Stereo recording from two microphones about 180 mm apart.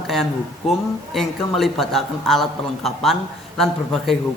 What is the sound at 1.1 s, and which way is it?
A woman's voice, centre (ahead or behind).